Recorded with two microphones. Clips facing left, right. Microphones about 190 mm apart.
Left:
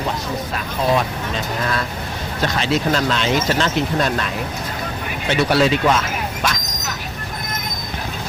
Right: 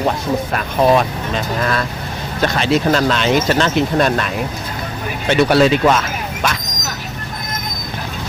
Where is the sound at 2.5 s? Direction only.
60° right (ahead or behind).